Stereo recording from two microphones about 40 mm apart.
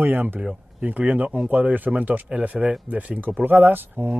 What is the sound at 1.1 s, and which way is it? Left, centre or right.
Speech, right.